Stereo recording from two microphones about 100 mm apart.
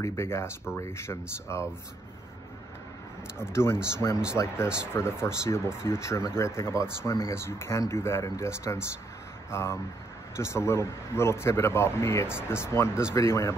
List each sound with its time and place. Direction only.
0.0 s speech: 30° left (ahead or behind)
3.3 s a man's voice: 25° left (ahead or behind)